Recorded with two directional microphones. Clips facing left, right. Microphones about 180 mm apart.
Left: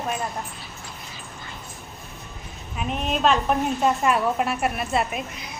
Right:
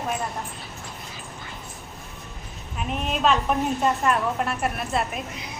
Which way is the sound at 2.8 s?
Centre (ahead or behind).